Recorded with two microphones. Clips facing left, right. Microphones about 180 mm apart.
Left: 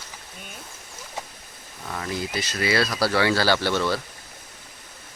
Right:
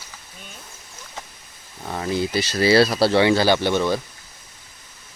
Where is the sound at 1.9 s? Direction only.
30° right (ahead or behind).